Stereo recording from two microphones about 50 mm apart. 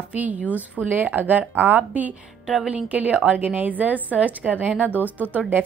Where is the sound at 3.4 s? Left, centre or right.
Right.